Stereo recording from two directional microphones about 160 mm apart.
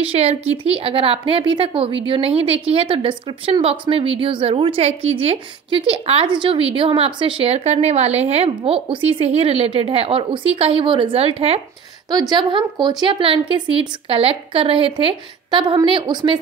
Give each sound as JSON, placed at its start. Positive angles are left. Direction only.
{"t": 0.0, "sound": "a woman's voice", "side_deg": -40}
{"t": 12.1, "sound": "a woman's voice", "side_deg": -25}